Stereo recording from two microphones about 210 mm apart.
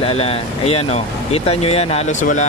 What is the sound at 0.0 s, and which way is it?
Speech, 25° left (ahead or behind).